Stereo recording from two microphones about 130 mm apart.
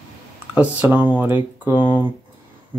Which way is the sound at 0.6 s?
10° right (ahead or behind).